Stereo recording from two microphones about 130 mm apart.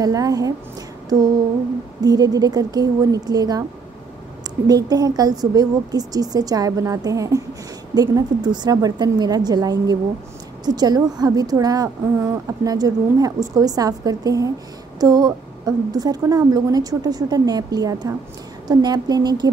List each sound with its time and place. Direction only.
0.0 s a woman's voice: 25° right (ahead or behind)
2.0 s a woman's voice: 30° right (ahead or behind)
4.6 s a woman's voice: 30° right (ahead or behind)